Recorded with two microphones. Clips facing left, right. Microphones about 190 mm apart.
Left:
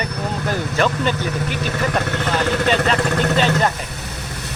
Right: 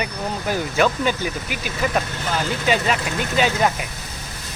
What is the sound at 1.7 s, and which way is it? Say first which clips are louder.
Speech: even; 70° left (ahead or behind).